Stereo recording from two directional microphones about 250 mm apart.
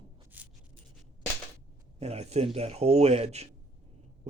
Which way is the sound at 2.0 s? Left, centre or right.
Right.